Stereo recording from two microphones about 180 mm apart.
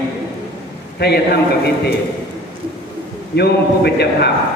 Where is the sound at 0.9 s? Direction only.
60° left (ahead or behind).